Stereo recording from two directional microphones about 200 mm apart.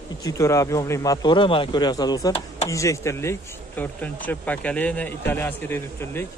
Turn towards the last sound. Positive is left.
turn(degrees=10)  # may be behind; listen again after turning